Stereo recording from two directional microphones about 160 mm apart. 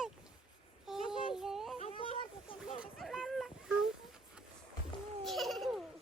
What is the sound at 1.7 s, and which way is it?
Speech, 35° left (ahead or behind).